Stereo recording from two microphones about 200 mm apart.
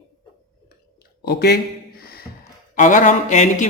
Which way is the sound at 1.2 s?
55° left (ahead or behind).